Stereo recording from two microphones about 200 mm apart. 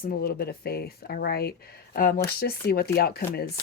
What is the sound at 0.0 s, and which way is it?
Speech, 45° left (ahead or behind).